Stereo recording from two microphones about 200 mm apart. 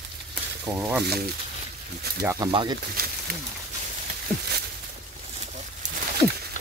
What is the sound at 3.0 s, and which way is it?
Speech, 50° right (ahead or behind).